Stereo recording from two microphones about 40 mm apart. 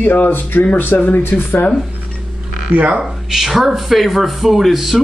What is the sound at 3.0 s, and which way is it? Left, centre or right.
Speech, centre.